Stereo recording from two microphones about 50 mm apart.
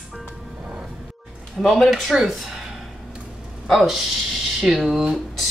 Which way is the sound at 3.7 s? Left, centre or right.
Centre.